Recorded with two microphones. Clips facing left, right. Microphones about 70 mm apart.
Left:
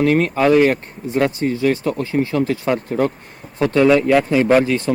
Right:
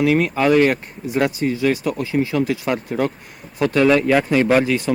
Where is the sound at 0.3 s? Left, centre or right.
Centre.